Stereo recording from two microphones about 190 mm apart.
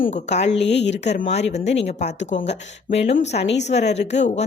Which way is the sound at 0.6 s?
65° left (ahead or behind).